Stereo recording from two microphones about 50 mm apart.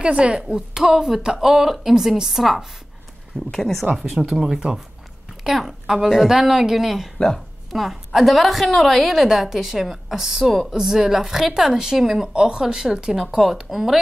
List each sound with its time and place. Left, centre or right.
0.0 s a woman's voice: right
0.7 s speech: centre
3.5 s speech: centre
3.9 s speech: centre
4.5 s a woman's voice: centre
13.4 s speech: centre